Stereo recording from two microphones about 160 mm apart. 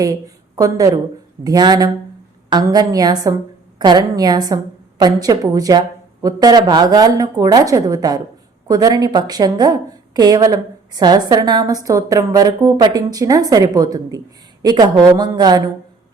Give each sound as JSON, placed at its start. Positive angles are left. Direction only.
{"t": 0.5, "sound": "a woman's voice", "side_deg": -20}